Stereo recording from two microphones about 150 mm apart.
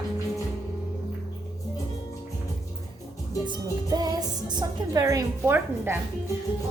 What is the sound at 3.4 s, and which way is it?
Speech, 25° right (ahead or behind).